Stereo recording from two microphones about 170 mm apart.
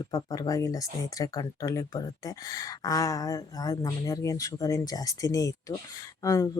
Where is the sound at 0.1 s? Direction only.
20° left (ahead or behind).